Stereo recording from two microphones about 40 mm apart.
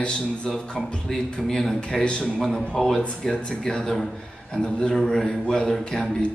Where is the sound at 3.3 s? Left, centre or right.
Left.